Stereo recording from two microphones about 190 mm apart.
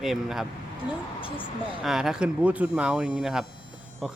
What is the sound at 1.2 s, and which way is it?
Speech, 25° left (ahead or behind).